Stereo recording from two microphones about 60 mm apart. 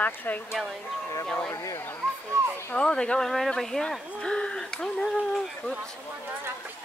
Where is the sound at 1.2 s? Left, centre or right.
Centre.